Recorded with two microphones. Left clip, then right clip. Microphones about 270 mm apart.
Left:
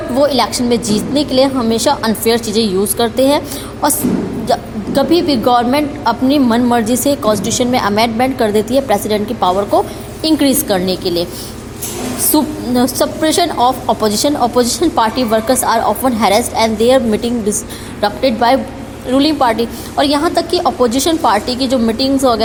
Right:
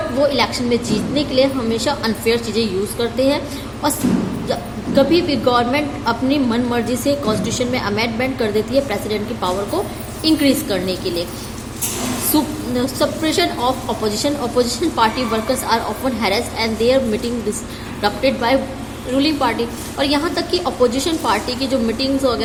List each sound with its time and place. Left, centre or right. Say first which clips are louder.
0.2 s a woman's voice: left 5 dB; left
12.3 s a woman's voice: left 5 dB; left